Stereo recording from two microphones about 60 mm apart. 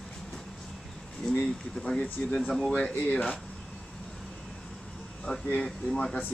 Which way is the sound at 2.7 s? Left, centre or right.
Left.